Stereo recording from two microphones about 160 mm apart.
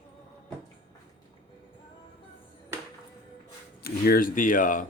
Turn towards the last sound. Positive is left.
turn(degrees=55)  # may be behind; listen again after turning